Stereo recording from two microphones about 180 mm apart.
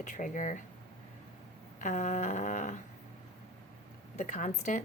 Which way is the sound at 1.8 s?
40° left (ahead or behind).